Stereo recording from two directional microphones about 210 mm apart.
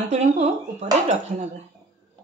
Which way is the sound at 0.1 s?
30° right (ahead or behind).